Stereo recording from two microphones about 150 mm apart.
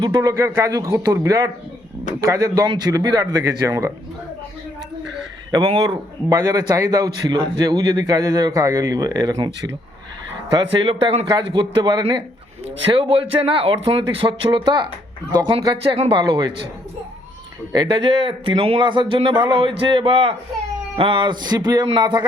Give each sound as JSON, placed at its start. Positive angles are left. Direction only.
{"t": 0.0, "sound": "a man's voice", "side_deg": -25}
{"t": 5.5, "sound": "a man's voice", "side_deg": -30}
{"t": 10.5, "sound": "a man's voice", "side_deg": -30}
{"t": 17.7, "sound": "a man's voice", "side_deg": -30}